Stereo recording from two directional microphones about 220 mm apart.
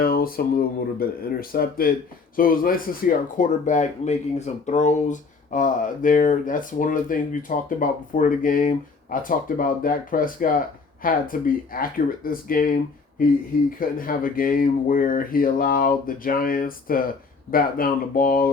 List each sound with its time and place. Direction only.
0.0 s speech: 40° left (ahead or behind)